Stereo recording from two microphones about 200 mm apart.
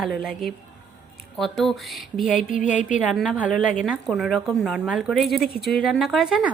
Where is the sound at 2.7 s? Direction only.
40° left (ahead or behind).